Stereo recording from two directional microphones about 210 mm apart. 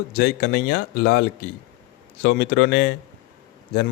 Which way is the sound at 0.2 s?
50° left (ahead or behind).